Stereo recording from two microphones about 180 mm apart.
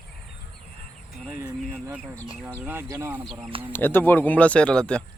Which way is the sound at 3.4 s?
30° right (ahead or behind).